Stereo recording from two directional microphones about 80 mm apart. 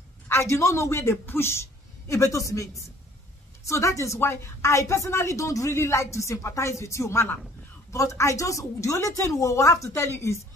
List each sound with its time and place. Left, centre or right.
0.3 s a woman's voice: left